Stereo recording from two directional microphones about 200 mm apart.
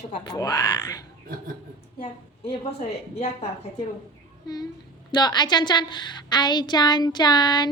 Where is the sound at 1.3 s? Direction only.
45° right (ahead or behind).